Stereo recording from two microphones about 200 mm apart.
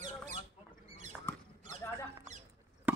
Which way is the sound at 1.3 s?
10° left (ahead or behind).